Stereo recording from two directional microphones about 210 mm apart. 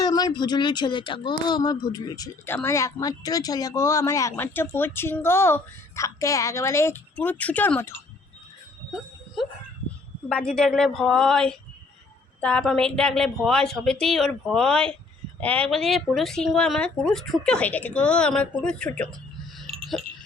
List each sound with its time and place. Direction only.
0.0 s speech: 20° left (ahead or behind)
10.2 s speech: 5° left (ahead or behind)